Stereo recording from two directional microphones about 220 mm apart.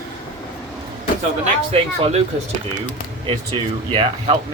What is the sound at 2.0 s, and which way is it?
Speech, 30° right (ahead or behind).